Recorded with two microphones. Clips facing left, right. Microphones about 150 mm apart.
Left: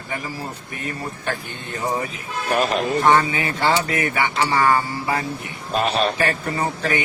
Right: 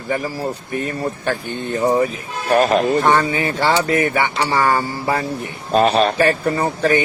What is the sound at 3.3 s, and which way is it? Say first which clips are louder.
Speech: right 3 dB; 35° right (ahead or behind).